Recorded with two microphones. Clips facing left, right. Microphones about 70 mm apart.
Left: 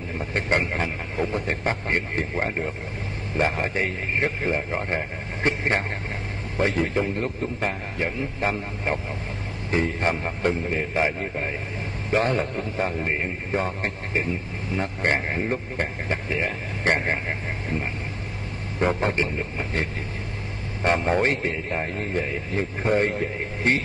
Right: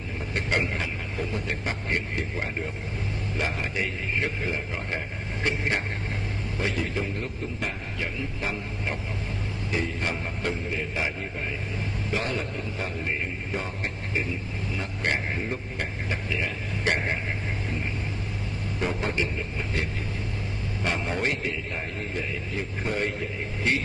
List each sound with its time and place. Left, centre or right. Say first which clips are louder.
0.3 s a man's voice: left 3 dB; left
18.8 s a man's voice: left 5 dB; left